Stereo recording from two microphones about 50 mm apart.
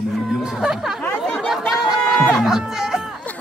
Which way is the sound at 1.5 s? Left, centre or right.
Centre.